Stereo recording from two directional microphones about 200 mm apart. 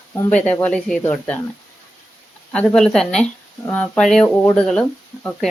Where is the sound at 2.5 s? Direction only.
5° left (ahead or behind).